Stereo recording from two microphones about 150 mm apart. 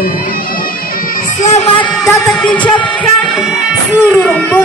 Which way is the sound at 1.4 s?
45° left (ahead or behind).